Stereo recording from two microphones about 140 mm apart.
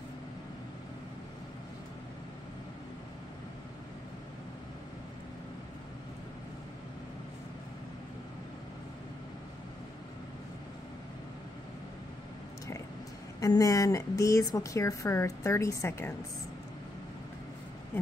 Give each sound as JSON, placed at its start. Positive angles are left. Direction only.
{"t": 13.4, "sound": "a woman's voice", "side_deg": 25}